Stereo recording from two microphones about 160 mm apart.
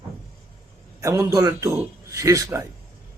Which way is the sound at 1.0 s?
20° right (ahead or behind).